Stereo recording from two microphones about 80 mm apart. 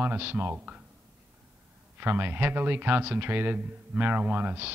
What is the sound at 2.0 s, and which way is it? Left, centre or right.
Speech, right.